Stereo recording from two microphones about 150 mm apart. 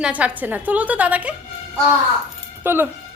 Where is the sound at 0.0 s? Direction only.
10° right (ahead or behind).